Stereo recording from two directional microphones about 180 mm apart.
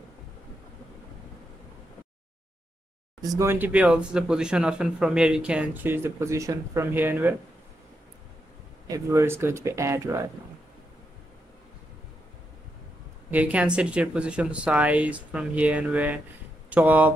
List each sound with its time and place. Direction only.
3.2 s speech: 20° right (ahead or behind)
8.8 s speech: 15° right (ahead or behind)
13.3 s speech: 10° right (ahead or behind)